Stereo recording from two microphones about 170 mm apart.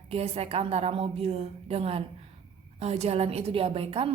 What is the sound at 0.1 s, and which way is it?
A woman's voice, 35° right (ahead or behind).